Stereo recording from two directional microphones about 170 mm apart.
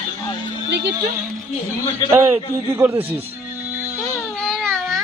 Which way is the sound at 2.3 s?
10° right (ahead or behind).